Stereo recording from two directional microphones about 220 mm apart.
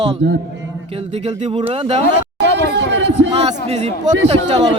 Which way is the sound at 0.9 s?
30° right (ahead or behind).